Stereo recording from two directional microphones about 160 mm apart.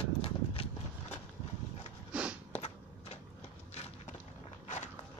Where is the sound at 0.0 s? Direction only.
35° left (ahead or behind).